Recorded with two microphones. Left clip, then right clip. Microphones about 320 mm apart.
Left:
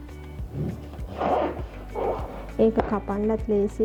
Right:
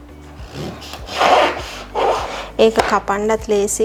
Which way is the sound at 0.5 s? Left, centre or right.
Centre.